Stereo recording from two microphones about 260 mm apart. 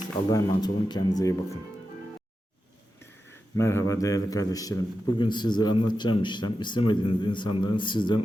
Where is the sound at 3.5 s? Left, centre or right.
Centre.